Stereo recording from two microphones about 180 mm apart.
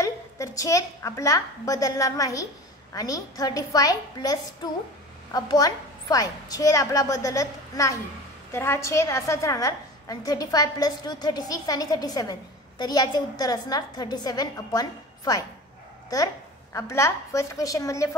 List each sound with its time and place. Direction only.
0.0 s a woman's voice: 20° left (ahead or behind)